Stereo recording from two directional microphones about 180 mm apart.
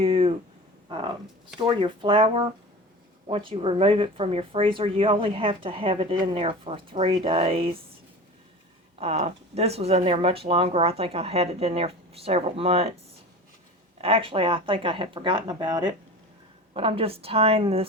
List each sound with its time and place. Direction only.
0.0 s a sound: 30° right (ahead or behind)
1.5 s speech: 25° right (ahead or behind)
9.0 s speech: 35° right (ahead or behind)
14.0 s speech: 30° right (ahead or behind)